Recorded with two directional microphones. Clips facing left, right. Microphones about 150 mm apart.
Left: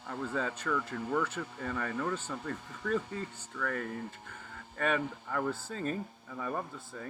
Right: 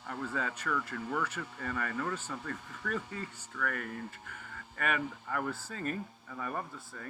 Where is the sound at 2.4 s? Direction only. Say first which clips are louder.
Left 5 dB; 25° left (ahead or behind).